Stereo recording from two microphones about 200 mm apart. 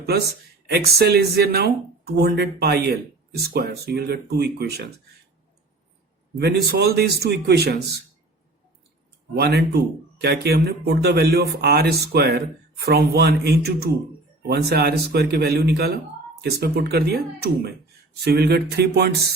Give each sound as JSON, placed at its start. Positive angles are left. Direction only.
{"t": 0.7, "sound": "a man's voice", "side_deg": -55}
{"t": 6.3, "sound": "a man's voice", "side_deg": -55}
{"t": 9.3, "sound": "a man's voice", "side_deg": -55}